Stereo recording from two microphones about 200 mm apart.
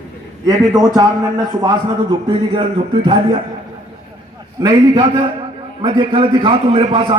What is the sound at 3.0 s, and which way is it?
Speech, 25° right (ahead or behind).